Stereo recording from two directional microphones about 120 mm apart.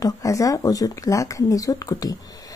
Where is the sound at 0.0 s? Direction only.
30° left (ahead or behind).